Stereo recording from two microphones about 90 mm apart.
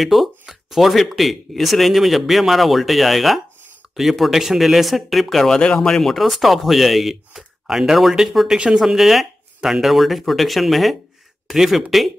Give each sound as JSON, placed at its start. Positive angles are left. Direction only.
{"t": 0.0, "sound": "speech", "side_deg": 0}